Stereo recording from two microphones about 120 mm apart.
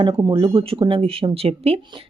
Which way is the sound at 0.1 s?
35° right (ahead or behind).